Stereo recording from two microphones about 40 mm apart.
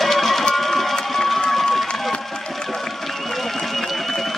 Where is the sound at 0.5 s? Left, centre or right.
Centre.